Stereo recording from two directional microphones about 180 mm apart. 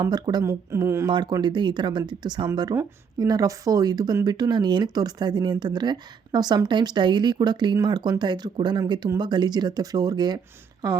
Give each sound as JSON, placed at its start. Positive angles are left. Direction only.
{"t": 0.0, "sound": "speech", "side_deg": -20}